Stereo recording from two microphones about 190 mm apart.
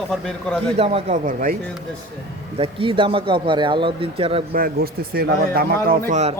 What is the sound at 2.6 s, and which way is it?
A man's voice, 25° right (ahead or behind).